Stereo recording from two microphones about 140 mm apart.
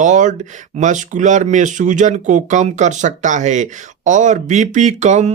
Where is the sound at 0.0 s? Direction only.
60° right (ahead or behind).